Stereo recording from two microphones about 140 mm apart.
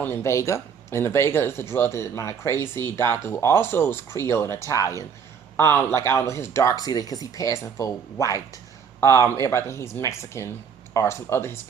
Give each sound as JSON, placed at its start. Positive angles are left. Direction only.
{"t": 0.0, "sound": "speech", "side_deg": 20}